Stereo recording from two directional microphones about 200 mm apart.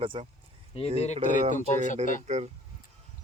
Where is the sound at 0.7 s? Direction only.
30° left (ahead or behind).